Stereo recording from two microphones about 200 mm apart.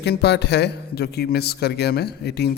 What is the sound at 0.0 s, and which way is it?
A man's voice, 55° left (ahead or behind).